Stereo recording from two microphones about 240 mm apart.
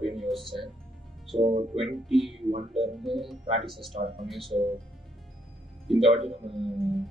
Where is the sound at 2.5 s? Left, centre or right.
Right.